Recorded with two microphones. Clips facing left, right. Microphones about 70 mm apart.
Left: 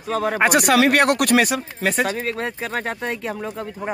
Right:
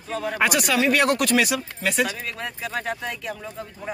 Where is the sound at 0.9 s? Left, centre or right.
Left.